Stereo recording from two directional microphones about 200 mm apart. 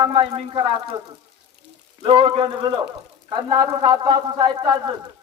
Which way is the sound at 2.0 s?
25° right (ahead or behind).